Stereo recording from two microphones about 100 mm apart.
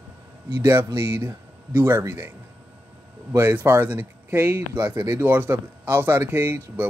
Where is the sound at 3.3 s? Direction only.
20° right (ahead or behind).